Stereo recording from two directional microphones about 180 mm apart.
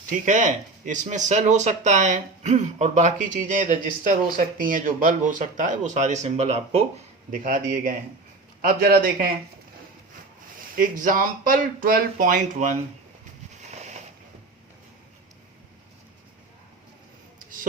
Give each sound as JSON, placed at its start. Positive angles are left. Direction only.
{"t": 0.1, "sound": "speech", "side_deg": -45}
{"t": 7.3, "sound": "speech", "side_deg": -50}
{"t": 10.8, "sound": "speech", "side_deg": -50}